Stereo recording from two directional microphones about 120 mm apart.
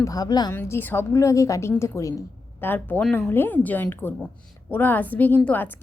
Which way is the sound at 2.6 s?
15° left (ahead or behind).